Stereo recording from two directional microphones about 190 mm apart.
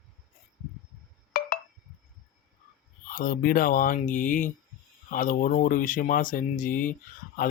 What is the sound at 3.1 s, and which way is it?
Speech, 50° left (ahead or behind).